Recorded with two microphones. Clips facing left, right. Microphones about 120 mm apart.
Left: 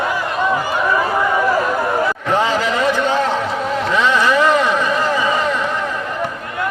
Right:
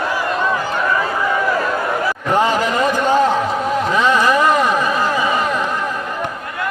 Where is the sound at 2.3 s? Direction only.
15° right (ahead or behind).